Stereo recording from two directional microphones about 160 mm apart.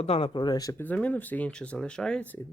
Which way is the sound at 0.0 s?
35° left (ahead or behind).